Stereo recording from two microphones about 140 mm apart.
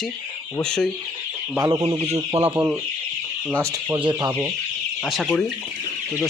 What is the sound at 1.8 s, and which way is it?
Speech, 45° right (ahead or behind).